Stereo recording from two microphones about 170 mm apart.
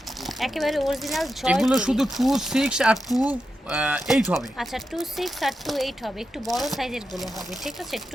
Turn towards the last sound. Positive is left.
turn(degrees=0)  # may be behind; listen again after turning